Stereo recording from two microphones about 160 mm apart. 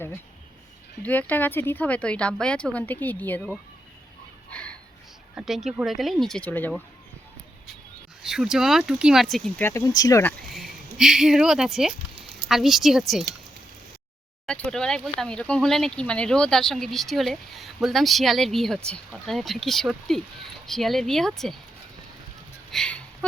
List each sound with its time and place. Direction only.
1.0 s speech: 10° left (ahead or behind)
4.5 s a sound: 5° left (ahead or behind)
5.3 s speech: 5° right (ahead or behind)
8.2 s speech: 5° right (ahead or behind)
9.6 s speech: 20° left (ahead or behind)
10.5 s speech: centre (ahead or behind)
14.4 s speech: 5° left (ahead or behind)
22.7 s speech: 5° left (ahead or behind)